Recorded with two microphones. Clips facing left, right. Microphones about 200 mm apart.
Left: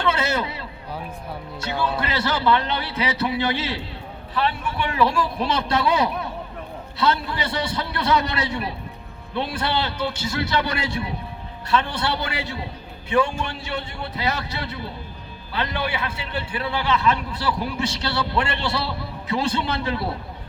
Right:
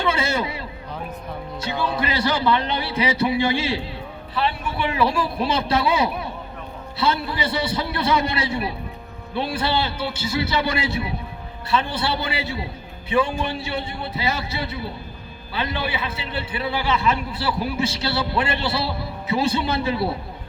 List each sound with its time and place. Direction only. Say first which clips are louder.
0.0 s a sound: even; 10° right (ahead or behind)
2.0 s a man's voice: right 2 dB; 15° right (ahead or behind)
4.9 s a man's voice: left 1 dB; 10° right (ahead or behind)